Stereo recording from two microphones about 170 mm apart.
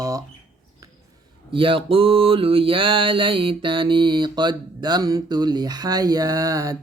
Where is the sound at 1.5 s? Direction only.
30° right (ahead or behind).